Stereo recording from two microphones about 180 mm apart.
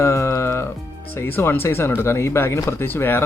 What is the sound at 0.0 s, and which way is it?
Music, 15° left (ahead or behind).